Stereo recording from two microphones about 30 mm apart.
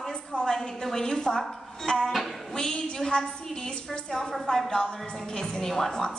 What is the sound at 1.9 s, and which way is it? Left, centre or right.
Speech, left.